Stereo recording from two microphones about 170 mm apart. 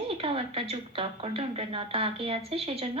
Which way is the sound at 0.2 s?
35° right (ahead or behind).